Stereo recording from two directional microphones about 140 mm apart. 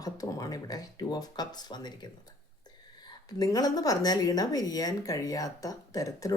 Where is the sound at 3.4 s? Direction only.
25° left (ahead or behind).